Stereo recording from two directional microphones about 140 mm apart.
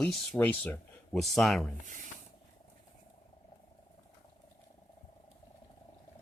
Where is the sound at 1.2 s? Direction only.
Centre (ahead or behind).